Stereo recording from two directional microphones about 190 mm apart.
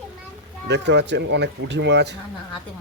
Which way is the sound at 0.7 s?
65° right (ahead or behind).